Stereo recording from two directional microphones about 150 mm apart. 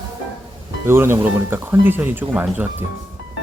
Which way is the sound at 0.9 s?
15° right (ahead or behind).